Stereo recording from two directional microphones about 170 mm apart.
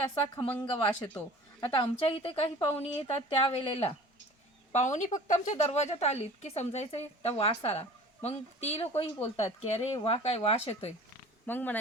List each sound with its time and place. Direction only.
0.4 s speech: 10° left (ahead or behind)
0.7 s a woman's voice: 30° left (ahead or behind)
4.7 s a woman's voice: 45° left (ahead or behind)
11.4 s speech: 10° left (ahead or behind)